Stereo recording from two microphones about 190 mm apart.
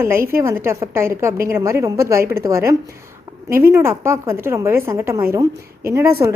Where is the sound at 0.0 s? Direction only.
15° right (ahead or behind).